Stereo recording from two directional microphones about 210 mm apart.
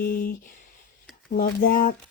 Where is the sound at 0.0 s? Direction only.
45° left (ahead or behind).